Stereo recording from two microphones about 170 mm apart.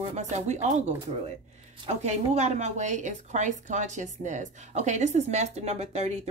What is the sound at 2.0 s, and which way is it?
A woman's voice, 40° right (ahead or behind).